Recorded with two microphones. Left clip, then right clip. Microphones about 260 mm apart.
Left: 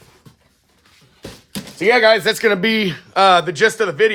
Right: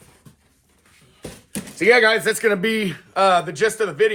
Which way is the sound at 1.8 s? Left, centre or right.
Left.